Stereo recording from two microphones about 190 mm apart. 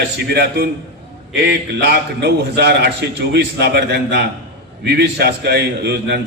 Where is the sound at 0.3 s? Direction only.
60° right (ahead or behind).